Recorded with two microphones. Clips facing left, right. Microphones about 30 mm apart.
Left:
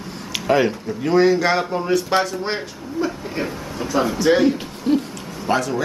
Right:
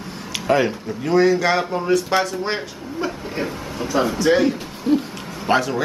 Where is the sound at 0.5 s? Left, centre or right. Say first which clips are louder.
Left 1 dB; centre.